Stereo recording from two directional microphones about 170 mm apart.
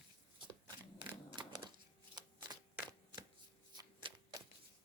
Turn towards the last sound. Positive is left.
turn(degrees=-25)  # may be behind; listen again after turning